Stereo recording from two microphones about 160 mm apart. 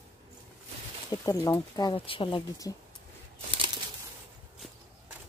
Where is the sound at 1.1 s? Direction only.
25° left (ahead or behind).